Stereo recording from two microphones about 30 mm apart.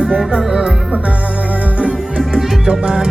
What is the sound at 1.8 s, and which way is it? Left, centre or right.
Music, right.